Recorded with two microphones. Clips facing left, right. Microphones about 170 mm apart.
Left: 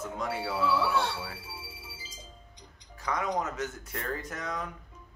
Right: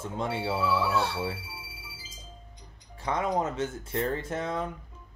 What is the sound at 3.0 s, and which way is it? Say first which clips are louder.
Speech: right 3 dB; 30° right (ahead or behind).